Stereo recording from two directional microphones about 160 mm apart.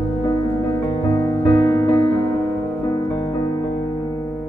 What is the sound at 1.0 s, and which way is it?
Music, 15° left (ahead or behind).